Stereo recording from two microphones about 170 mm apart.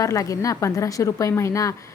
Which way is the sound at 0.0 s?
20° left (ahead or behind).